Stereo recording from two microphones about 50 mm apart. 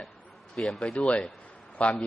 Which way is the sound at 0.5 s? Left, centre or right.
Centre.